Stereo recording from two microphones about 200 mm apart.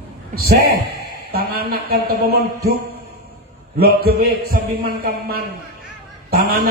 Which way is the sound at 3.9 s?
50° right (ahead or behind).